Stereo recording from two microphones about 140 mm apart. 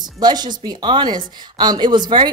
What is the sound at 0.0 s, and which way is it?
A woman's voice, 30° right (ahead or behind).